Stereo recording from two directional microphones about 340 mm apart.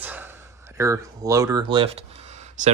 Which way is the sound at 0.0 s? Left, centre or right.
Centre.